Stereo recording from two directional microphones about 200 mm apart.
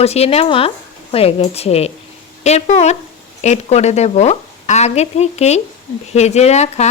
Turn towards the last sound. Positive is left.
turn(degrees=35)  # may be behind; listen again after turning